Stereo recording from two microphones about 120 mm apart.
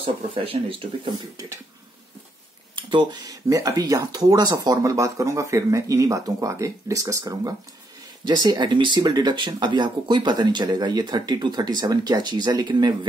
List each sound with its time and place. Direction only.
0.0 s speech: 50° right (ahead or behind)
1.1 s speech: 30° right (ahead or behind)
2.7 s speech: 40° right (ahead or behind)